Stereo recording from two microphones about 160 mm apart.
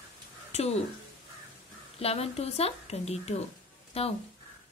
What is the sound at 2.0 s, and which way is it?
Speech, 40° left (ahead or behind).